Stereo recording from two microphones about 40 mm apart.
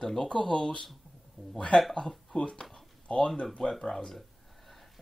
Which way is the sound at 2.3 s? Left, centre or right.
Centre.